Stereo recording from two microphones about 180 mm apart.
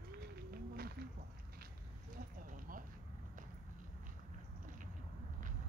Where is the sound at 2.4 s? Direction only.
50° right (ahead or behind).